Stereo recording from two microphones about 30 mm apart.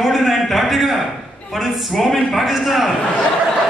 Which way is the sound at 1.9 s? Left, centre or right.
Centre.